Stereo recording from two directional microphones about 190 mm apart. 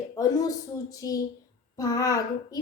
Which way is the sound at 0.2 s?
20° left (ahead or behind).